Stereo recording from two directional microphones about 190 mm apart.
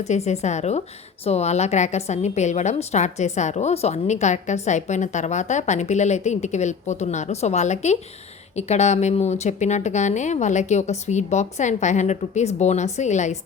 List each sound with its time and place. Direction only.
0.1 s a woman's voice: 35° left (ahead or behind)